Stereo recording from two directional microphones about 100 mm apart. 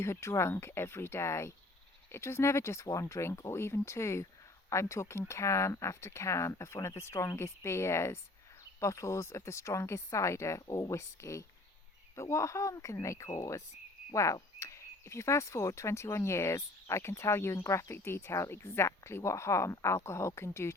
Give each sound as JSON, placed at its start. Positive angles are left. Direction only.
{"t": 0.0, "sound": "speech", "side_deg": 25}